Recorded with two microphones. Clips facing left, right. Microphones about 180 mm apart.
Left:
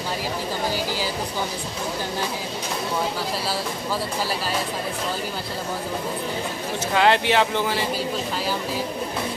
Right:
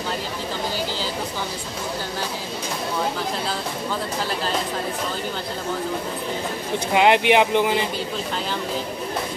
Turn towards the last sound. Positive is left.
turn(degrees=-20)  # may be behind; listen again after turning